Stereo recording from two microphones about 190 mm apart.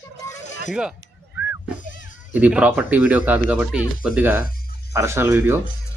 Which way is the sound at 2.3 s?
5° right (ahead or behind).